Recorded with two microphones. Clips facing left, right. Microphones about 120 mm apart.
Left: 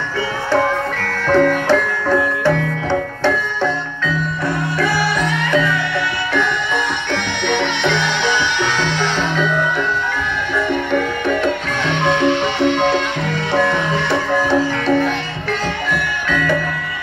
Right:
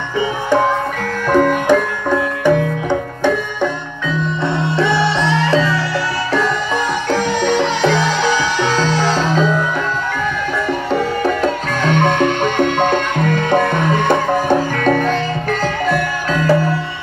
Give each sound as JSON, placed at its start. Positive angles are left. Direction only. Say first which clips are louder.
{"t": 1.3, "sound": "music", "louder": "right 1 dB", "side_deg": -10}
{"t": 7.1, "sound": "music", "louder": "right 7 dB", "side_deg": -40}
{"t": 10.7, "sound": "music", "louder": "right 1 dB", "side_deg": -35}
{"t": 15.9, "sound": "music", "louder": "right 3 dB", "side_deg": -35}